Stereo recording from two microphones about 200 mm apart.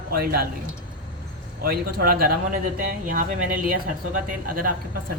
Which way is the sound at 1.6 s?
50° right (ahead or behind).